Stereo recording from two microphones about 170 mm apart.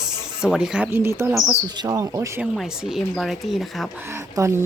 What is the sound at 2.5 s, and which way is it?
Speech, 5° right (ahead or behind).